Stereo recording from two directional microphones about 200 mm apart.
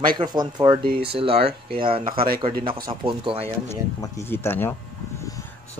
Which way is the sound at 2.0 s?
50° right (ahead or behind).